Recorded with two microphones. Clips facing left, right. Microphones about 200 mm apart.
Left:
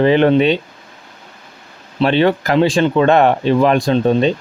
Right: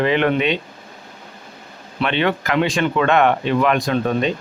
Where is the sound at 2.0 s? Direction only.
35° left (ahead or behind).